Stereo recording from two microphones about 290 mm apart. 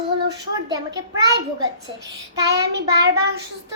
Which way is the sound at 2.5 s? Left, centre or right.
Right.